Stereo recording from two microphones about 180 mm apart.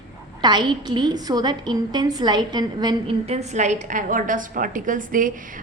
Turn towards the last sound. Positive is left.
turn(degrees=-50)  # may be behind; listen again after turning